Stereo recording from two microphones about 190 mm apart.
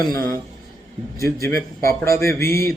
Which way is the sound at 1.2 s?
15° left (ahead or behind).